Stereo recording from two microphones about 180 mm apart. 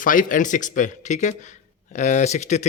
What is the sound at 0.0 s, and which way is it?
Speech, 45° left (ahead or behind).